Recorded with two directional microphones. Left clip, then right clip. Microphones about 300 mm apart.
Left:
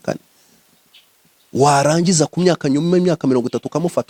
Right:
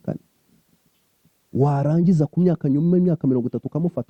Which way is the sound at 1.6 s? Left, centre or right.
Centre.